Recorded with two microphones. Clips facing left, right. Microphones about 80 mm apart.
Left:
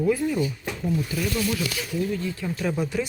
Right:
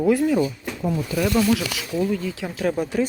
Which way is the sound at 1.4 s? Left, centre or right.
Right.